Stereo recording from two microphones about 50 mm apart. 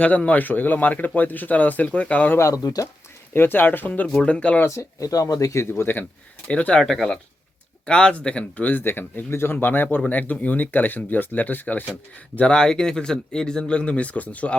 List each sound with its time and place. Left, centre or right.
0.3 s speech: left
2.4 s speech: left
3.3 s speech: left
4.6 s speech: left
5.8 s speech: left
6.5 s speech: left
6.7 s speech: centre
7.9 s speech: centre
8.6 s speech: left
12.4 s speech: centre